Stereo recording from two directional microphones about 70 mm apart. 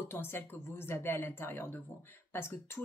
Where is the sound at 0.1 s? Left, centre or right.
Left.